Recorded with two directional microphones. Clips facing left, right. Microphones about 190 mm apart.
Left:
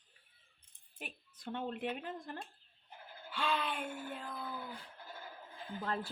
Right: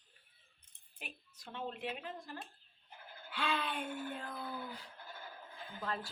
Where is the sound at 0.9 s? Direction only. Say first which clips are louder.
Left 3 dB; 55° left (ahead or behind).